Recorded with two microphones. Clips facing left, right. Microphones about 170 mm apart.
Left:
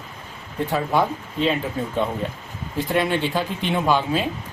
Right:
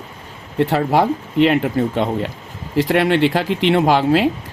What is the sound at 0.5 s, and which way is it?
Speech, 75° right (ahead or behind).